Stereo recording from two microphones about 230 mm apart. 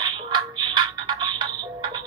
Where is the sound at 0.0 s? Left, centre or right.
Centre.